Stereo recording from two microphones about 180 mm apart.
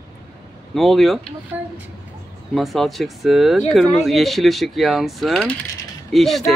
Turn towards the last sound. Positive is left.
turn(degrees=0)  # may be behind; listen again after turning